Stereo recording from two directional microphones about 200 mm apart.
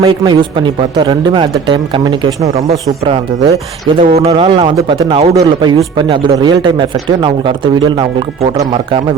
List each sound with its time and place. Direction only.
0.0 s speech: 20° right (ahead or behind)
4.0 s speech: 30° right (ahead or behind)